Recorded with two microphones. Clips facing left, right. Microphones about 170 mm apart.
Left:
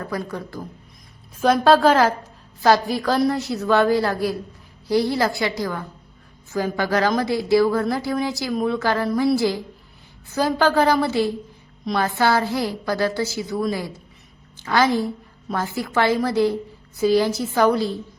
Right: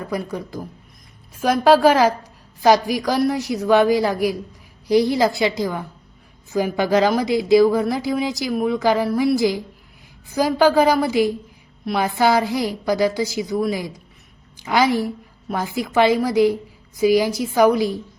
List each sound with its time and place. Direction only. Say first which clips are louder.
0.0 s a woman's voice: right 2 dB; 15° right (ahead or behind)